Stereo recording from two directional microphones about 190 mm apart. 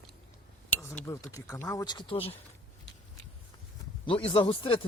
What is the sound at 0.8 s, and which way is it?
Speech, 15° left (ahead or behind).